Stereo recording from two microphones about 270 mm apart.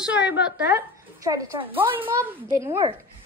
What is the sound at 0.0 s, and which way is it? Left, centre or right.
A woman's voice, centre.